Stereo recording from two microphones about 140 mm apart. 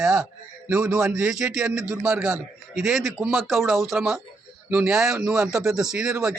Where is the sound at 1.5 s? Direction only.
Centre (ahead or behind).